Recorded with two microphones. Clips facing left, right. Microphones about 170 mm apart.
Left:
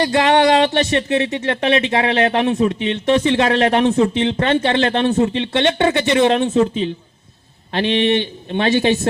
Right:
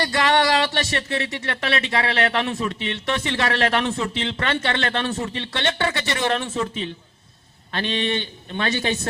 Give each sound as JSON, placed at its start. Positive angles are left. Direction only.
{"t": 0.0, "sound": "speech", "side_deg": 20}
{"t": 7.7, "sound": "speech", "side_deg": 20}